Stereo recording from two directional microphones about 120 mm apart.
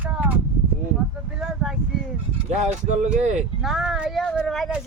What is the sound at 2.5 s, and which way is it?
Speech, 80° right.